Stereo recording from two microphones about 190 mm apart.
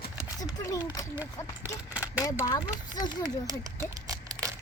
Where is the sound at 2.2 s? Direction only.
15° left (ahead or behind).